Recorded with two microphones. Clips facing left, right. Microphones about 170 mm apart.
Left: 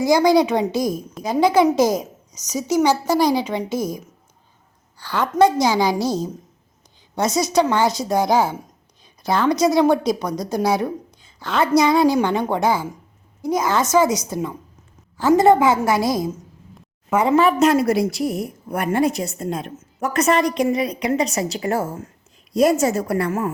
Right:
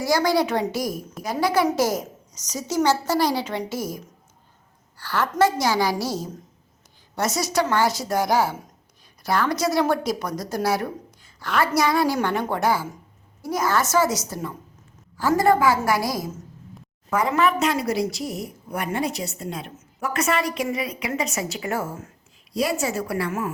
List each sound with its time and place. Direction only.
0.0 s a woman's voice: 20° left (ahead or behind)
17.6 s a woman's voice: 50° left (ahead or behind); by 22.1 s 35° left (ahead or behind)
22.5 s a woman's voice: 45° left (ahead or behind)